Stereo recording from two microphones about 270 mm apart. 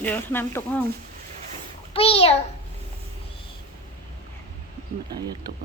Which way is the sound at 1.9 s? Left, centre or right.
Left.